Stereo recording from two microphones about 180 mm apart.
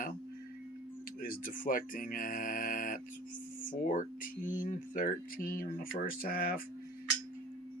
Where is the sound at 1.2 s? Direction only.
55° left (ahead or behind).